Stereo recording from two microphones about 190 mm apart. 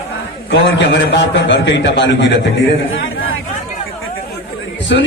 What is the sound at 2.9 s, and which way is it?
Chatter, 90° left.